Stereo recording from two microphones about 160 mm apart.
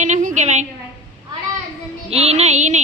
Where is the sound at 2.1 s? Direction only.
40° right (ahead or behind).